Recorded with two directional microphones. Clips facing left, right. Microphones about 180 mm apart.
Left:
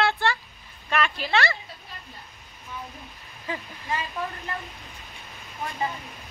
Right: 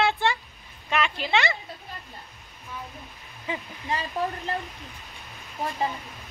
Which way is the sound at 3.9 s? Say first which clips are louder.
Right 2 dB; 35° right (ahead or behind).